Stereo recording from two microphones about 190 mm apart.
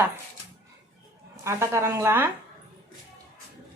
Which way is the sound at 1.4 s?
15° right (ahead or behind).